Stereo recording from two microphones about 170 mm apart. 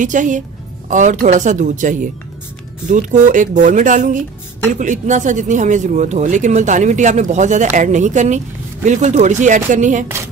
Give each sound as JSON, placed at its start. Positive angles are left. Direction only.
{"t": 0.0, "sound": "speech", "side_deg": -50}